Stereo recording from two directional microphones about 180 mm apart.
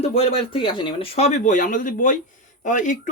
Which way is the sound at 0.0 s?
35° left (ahead or behind).